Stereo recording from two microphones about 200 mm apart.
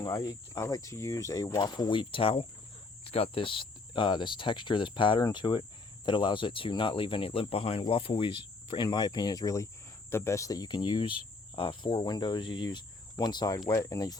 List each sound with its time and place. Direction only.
0.0 s speech: 20° left (ahead or behind)